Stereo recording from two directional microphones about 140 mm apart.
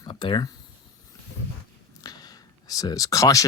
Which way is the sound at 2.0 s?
30° left (ahead or behind).